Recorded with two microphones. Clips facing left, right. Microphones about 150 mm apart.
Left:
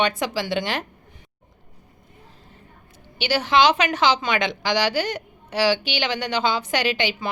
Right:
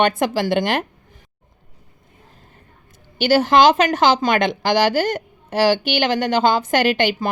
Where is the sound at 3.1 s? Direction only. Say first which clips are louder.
Right 6 dB; 45° right (ahead or behind).